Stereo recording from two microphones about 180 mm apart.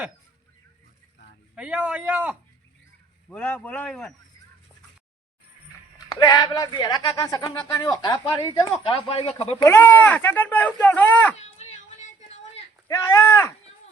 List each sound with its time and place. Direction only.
1.5 s a man's voice: 10° right (ahead or behind)
3.2 s speech: 10° left (ahead or behind)
6.1 s a man's voice: 25° left (ahead or behind)
9.6 s speech: 10° left (ahead or behind)
11.4 s a sound: 40° left (ahead or behind)
12.9 s speech: 15° left (ahead or behind)